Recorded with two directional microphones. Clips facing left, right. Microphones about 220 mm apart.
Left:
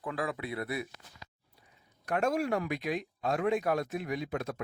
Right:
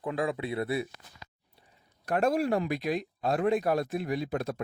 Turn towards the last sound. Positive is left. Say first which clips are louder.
# right 3 dB
turn(degrees=-35)  # may be behind; listen again after turning